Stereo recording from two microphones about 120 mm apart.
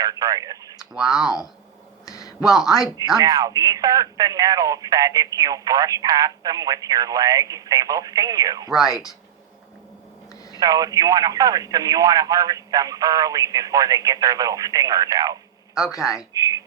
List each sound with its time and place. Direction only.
0.0 s speech: 30° right (ahead or behind)
0.8 s speech: 5° right (ahead or behind)
2.0 s a sound: 30° left (ahead or behind)
2.4 s speech: 5° right (ahead or behind)
3.2 s speech: 30° right (ahead or behind)
8.9 s speech: 30° left (ahead or behind)
10.6 s speech: 30° right (ahead or behind)
15.9 s speech: 25° left (ahead or behind)
16.3 s speech: 30° right (ahead or behind)